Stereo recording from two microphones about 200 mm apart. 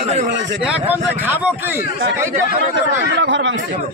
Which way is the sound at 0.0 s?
35° right (ahead or behind).